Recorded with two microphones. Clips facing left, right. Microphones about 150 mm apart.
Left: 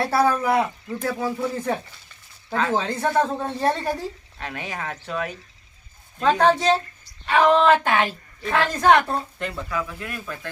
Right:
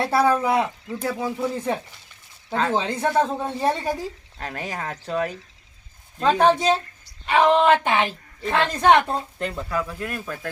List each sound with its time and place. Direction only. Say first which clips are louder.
0.0 s a woman's voice: right 1 dB; 20° right (ahead or behind)
4.4 s speech: right 2 dB; 40° right (ahead or behind)
6.4 s a woman's voice: even; 15° right (ahead or behind)
9.6 s speech: right 2 dB; 45° right (ahead or behind)